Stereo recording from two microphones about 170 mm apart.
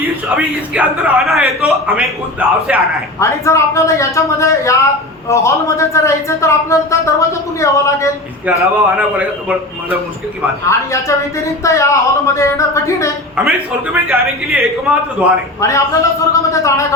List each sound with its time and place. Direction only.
0.3 s a man's voice: 10° right (ahead or behind)
3.2 s a woman's voice: 15° left (ahead or behind)
9.0 s a man's voice: 10° right (ahead or behind)
11.1 s a woman's voice: 20° left (ahead or behind)
13.9 s a man's voice: 5° right (ahead or behind)
15.6 s a woman's voice: 20° left (ahead or behind)